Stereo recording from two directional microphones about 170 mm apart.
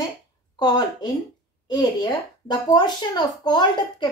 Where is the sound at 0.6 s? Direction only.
25° left (ahead or behind).